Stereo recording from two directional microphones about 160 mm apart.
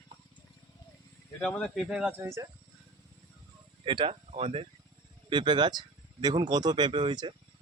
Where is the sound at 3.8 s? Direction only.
30° right (ahead or behind).